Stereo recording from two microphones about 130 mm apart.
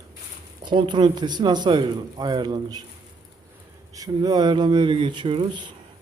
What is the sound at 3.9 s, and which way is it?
Speech, 30° right (ahead or behind).